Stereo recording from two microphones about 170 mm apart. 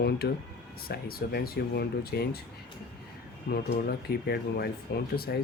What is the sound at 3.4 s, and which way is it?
Speech, 65° left (ahead or behind).